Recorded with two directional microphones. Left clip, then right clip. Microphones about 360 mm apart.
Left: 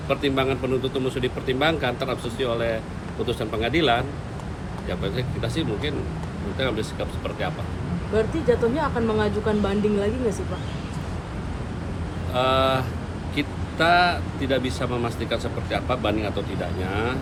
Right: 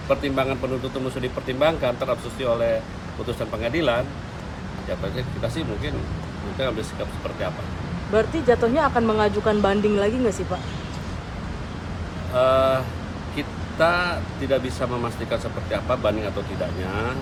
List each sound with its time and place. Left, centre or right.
0.1 s speech: centre
6.6 s speech: centre
8.1 s speech: right
12.3 s speech: centre